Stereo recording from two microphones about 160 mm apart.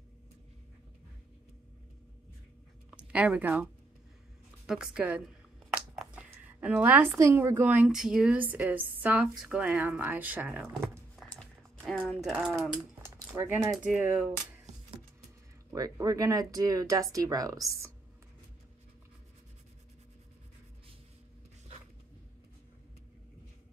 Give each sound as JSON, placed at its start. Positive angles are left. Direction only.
{"t": 3.0, "sound": "speech", "side_deg": -5}
{"t": 4.6, "sound": "a sound", "side_deg": -5}
{"t": 7.2, "sound": "a woman's voice", "side_deg": -20}
{"t": 11.2, "sound": "a sound", "side_deg": 0}
{"t": 12.2, "sound": "mechanisms", "side_deg": -5}
{"t": 13.9, "sound": "a woman's voice", "side_deg": -10}
{"t": 15.7, "sound": "speech", "side_deg": -20}